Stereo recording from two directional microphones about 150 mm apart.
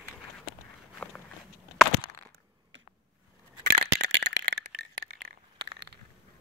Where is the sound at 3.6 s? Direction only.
90° right.